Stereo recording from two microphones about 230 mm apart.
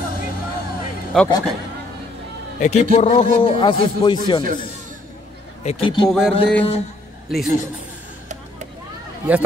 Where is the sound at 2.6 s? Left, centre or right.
Left.